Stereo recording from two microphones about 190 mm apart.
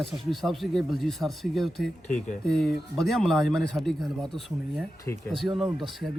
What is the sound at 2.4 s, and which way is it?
A man's voice, centre (ahead or behind).